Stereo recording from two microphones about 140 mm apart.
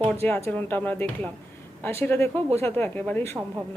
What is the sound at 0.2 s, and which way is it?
Speech, 15° left (ahead or behind).